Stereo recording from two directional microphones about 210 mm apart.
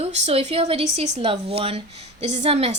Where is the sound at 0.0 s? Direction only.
30° right (ahead or behind).